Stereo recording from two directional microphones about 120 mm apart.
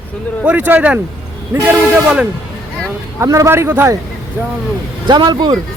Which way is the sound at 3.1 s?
25° right (ahead or behind).